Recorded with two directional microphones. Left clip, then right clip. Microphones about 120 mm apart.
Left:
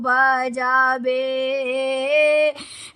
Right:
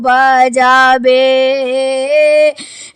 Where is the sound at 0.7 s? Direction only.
65° right (ahead or behind).